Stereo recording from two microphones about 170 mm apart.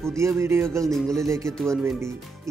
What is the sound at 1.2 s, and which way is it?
Speech, 15° right (ahead or behind).